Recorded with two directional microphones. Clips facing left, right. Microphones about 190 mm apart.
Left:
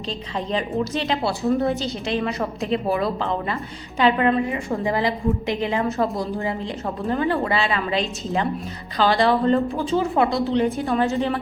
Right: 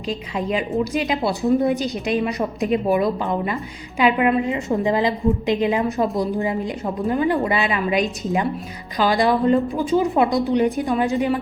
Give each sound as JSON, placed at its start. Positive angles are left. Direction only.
{"t": 0.1, "sound": "a woman's voice", "side_deg": -10}